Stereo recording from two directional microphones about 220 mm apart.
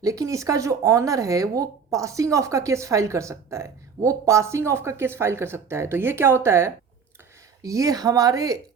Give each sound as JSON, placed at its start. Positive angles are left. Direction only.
{"t": 0.0, "sound": "speech", "side_deg": -15}